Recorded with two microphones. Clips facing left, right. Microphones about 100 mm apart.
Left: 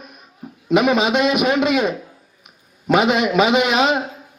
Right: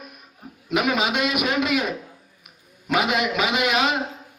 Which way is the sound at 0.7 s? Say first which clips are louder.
Left 7 dB; 25° left (ahead or behind).